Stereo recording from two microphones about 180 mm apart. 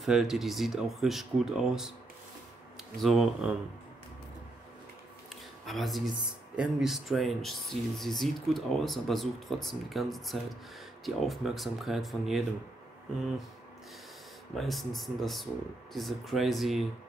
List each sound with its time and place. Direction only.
0.0 s speech: centre (ahead or behind)
3.0 s speech: centre (ahead or behind)
5.7 s speech: centre (ahead or behind)
14.5 s speech: centre (ahead or behind)